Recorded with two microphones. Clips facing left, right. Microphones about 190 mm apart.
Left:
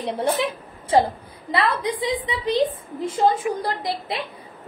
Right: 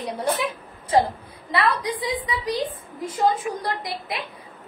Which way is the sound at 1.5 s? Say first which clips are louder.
Left 1 dB; 25° left (ahead or behind).